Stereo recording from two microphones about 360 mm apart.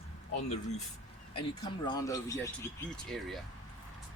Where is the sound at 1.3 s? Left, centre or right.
Centre.